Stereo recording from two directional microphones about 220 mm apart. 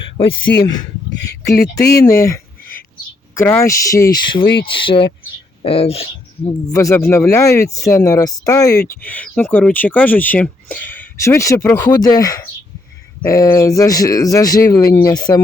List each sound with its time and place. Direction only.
0.0 s a sound: 25° left (ahead or behind)
0.6 s speech: 20° left (ahead or behind)
3.3 s speech: 10° left (ahead or behind)
6.7 s speech: 15° left (ahead or behind)